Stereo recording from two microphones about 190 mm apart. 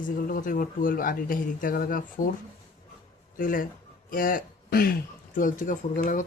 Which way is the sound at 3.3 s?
45° left (ahead or behind).